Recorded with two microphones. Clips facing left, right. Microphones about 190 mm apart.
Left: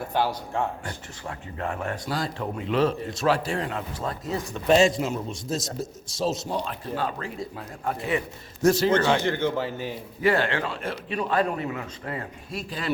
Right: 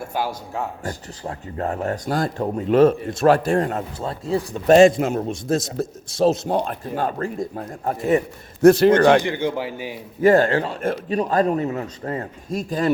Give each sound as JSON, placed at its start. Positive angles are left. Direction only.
{"t": 0.1, "sound": "speech", "side_deg": -10}
{"t": 0.9, "sound": "a man's voice", "side_deg": -35}
{"t": 4.0, "sound": "speech", "side_deg": -30}
{"t": 4.6, "sound": "a man's voice", "side_deg": -55}
{"t": 8.6, "sound": "a man's voice", "side_deg": -60}
{"t": 9.2, "sound": "speech", "side_deg": -15}
{"t": 10.2, "sound": "a man's voice", "side_deg": -45}